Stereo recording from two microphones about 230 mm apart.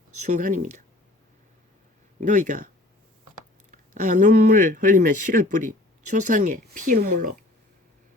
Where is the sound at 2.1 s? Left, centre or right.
Right.